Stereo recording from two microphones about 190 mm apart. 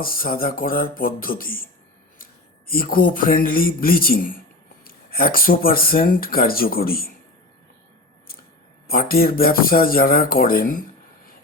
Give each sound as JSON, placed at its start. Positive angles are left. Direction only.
{"t": 0.0, "sound": "speech", "side_deg": 50}
{"t": 8.9, "sound": "speech", "side_deg": 50}